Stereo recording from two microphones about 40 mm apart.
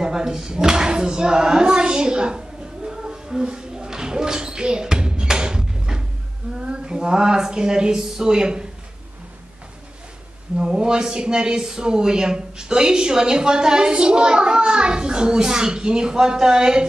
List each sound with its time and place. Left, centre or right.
0.0 s a sound: centre
6.6 s speech: right
10.6 s a man's voice: centre